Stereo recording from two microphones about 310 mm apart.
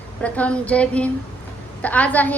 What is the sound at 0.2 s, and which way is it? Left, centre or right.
A woman's voice, centre.